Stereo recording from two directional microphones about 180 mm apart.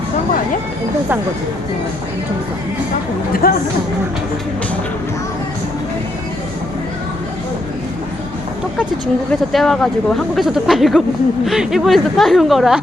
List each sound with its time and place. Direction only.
3.4 s speech: 55° left (ahead or behind)
9.5 s speech: centre (ahead or behind)